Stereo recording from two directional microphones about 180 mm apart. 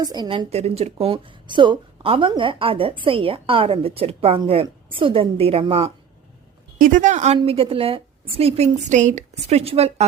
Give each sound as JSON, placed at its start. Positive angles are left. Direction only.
{"t": 0.0, "sound": "a woman's voice", "side_deg": -25}
{"t": 6.7, "sound": "a woman's voice", "side_deg": -50}